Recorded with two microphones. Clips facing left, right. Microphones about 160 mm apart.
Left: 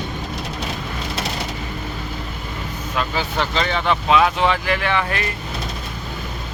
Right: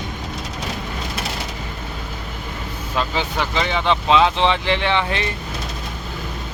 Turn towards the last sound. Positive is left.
turn(degrees=-25)  # may be behind; listen again after turning